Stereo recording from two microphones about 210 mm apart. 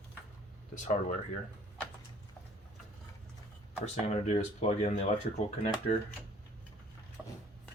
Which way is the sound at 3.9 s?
30° left (ahead or behind).